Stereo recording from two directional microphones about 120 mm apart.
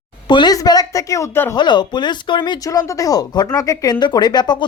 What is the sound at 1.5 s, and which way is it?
Speech, 40° left (ahead or behind).